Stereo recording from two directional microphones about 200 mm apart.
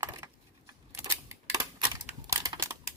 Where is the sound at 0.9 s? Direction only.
15° right (ahead or behind).